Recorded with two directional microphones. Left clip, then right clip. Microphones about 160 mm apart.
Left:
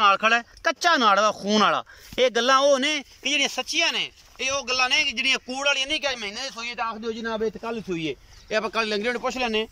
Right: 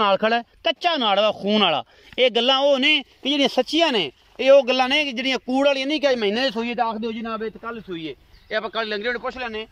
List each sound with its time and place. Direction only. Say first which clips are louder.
0.0 s speech: even; 40° right (ahead or behind)
0.7 s speech: left 1 dB; 5° right (ahead or behind)
3.2 s speech: right 4 dB; 35° right (ahead or behind)
6.1 s speech: right 10 dB; 55° right (ahead or behind)
7.4 s a man's voice: left 2 dB; 10° left (ahead or behind)